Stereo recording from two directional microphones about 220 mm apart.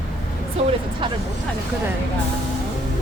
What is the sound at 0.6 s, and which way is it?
Music, 30° right (ahead or behind).